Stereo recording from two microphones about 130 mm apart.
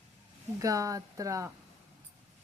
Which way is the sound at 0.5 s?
25° right (ahead or behind).